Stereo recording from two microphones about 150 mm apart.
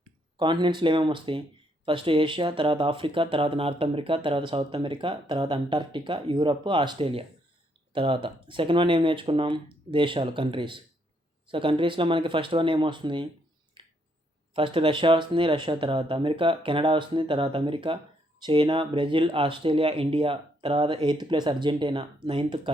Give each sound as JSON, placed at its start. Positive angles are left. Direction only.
{"t": 0.3, "sound": "speech", "side_deg": -30}
{"t": 13.8, "sound": "a sound", "side_deg": -35}
{"t": 14.5, "sound": "speech", "side_deg": -35}